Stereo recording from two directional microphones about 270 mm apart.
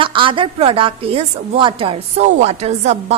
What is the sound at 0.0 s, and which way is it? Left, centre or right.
A woman's voice, centre.